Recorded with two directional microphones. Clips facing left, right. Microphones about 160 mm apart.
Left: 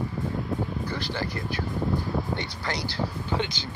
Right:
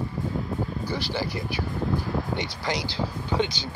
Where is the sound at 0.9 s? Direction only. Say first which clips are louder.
Right 2 dB; 10° right (ahead or behind).